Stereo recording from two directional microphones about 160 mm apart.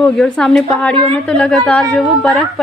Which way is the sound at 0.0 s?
5° left (ahead or behind).